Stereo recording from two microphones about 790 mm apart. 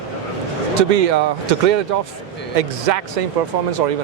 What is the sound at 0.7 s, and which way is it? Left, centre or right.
Speech, right.